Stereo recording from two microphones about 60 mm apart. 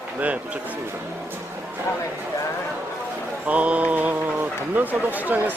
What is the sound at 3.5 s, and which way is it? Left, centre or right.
Speech, right.